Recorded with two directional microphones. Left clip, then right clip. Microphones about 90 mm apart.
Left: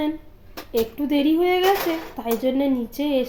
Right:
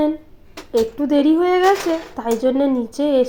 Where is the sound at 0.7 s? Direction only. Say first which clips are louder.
Right 5 dB; 35° right (ahead or behind).